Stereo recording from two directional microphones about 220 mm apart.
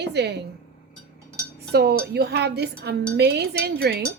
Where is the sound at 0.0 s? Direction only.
50° right (ahead or behind).